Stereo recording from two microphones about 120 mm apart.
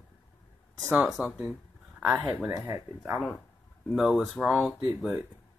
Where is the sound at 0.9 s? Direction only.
5° right (ahead or behind).